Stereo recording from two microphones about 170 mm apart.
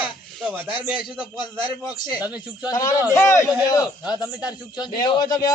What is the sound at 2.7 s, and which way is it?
A man's voice, 20° left (ahead or behind).